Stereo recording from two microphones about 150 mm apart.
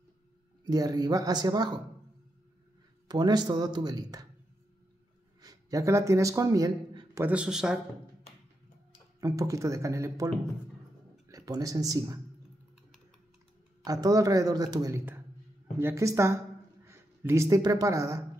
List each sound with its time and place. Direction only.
0.7 s speech: 25° right (ahead or behind)
3.1 s speech: 30° right (ahead or behind)
5.4 s speech: 25° right (ahead or behind)
7.2 s speech: 10° right (ahead or behind)
9.2 s speech: 20° right (ahead or behind)
13.8 s speech: 25° right (ahead or behind)